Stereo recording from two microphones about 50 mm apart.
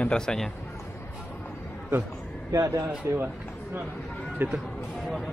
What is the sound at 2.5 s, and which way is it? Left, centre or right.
Speech, right.